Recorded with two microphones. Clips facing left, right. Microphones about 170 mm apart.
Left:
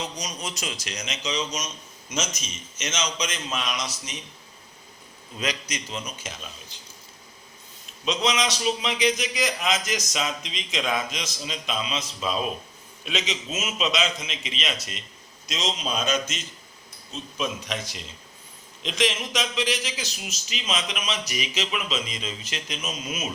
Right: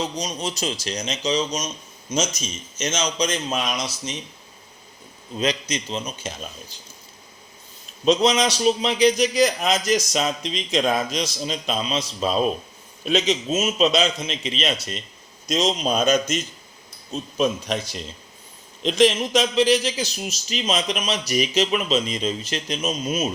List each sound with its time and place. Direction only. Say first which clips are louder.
0.0 s a man's voice: right 6 dB; 25° right (ahead or behind)
5.4 s a man's voice: right 6 dB; 25° right (ahead or behind)
8.0 s a man's voice: right 7 dB; 35° right (ahead or behind)